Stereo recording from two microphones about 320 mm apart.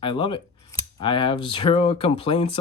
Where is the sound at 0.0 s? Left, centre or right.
Centre.